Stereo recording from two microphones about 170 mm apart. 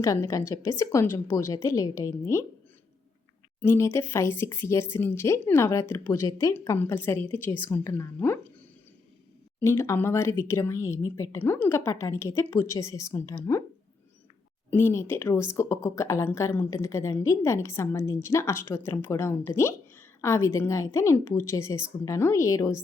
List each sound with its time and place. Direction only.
0.0 s speech: 15° left (ahead or behind)
3.6 s speech: 15° left (ahead or behind)
9.6 s speech: 15° left (ahead or behind)
14.7 s speech: 15° left (ahead or behind)